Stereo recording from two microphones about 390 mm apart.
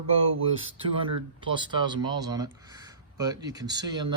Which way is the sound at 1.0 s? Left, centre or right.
Centre.